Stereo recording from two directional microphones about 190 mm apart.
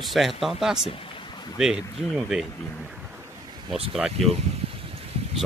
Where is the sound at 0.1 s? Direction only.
Centre (ahead or behind).